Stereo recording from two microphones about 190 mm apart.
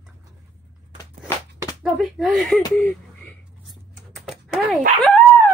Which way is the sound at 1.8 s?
5° right (ahead or behind).